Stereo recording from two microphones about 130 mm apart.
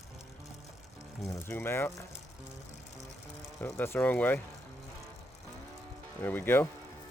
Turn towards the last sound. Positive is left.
turn(degrees=15)  # may be behind; listen again after turning